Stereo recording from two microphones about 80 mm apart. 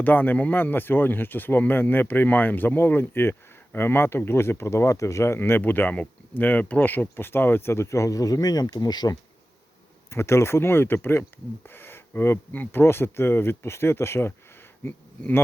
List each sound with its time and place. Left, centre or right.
0.0 s speech: left
10.1 s speech: left